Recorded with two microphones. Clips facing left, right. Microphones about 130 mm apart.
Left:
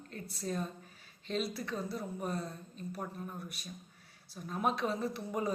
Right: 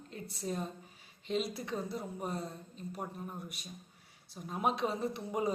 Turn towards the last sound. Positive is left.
turn(degrees=-20)  # may be behind; listen again after turning